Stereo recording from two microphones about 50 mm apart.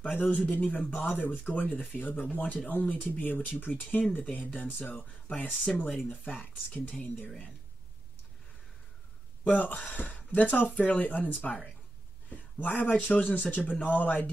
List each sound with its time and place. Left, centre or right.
0.1 s speech: left
5.9 s speech: centre
6.3 s speech: left
9.4 s speech: left